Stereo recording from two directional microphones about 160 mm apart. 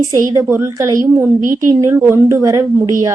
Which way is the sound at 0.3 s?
20° right (ahead or behind).